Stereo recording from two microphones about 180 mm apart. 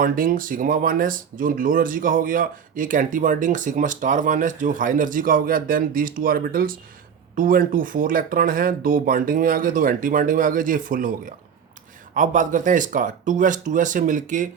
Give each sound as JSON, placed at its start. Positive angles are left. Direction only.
{"t": 0.0, "sound": "speech", "side_deg": -50}